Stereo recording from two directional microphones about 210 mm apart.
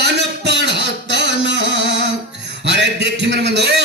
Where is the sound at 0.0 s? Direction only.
55° right (ahead or behind).